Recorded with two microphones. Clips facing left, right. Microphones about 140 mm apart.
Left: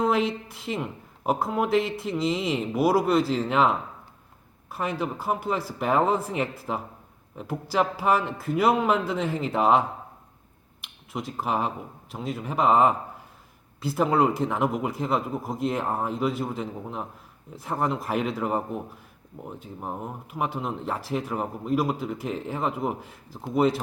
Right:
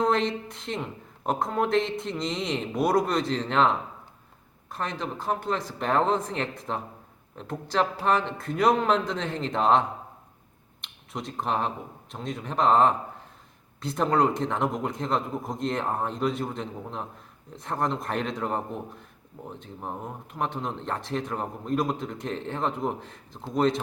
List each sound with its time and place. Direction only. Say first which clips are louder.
0.0 s speech: left 1 dB; 5° left (ahead or behind)